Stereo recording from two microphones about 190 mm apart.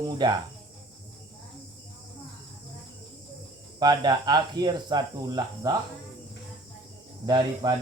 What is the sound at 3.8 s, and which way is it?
Speech, 20° right (ahead or behind).